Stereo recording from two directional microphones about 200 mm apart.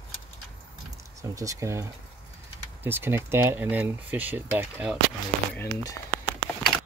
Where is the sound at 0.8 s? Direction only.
15° right (ahead or behind).